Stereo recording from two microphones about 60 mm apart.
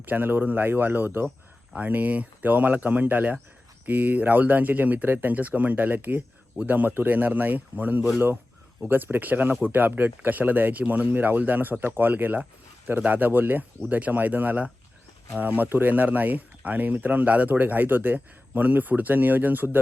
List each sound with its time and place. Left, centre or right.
0.0 s speech: right